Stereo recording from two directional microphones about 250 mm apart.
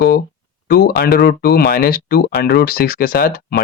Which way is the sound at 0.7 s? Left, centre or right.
Left.